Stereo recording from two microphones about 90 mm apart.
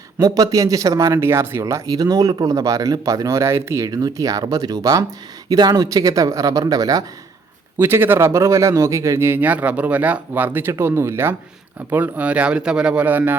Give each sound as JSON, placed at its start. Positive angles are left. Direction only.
{"t": 0.2, "sound": "speech", "side_deg": -40}
{"t": 1.2, "sound": "speech", "side_deg": -25}
{"t": 3.8, "sound": "speech", "side_deg": -40}
{"t": 7.8, "sound": "speech", "side_deg": -25}